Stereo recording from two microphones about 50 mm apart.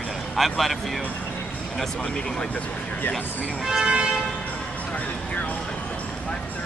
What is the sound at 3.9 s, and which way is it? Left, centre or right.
Vehicle, centre.